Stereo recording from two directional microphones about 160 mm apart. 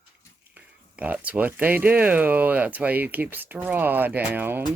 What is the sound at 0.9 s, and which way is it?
Speech, 10° right (ahead or behind).